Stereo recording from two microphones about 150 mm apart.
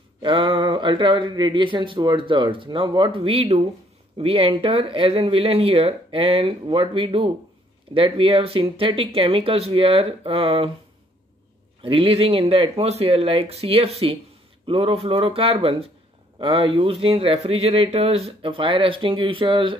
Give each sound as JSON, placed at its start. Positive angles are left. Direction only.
{"t": 0.2, "sound": "speech", "side_deg": -35}
{"t": 11.8, "sound": "speech", "side_deg": -35}